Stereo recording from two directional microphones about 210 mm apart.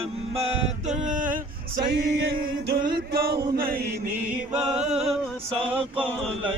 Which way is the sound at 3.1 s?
50° right (ahead or behind).